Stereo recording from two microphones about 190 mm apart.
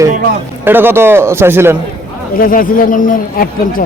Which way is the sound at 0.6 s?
10° right (ahead or behind).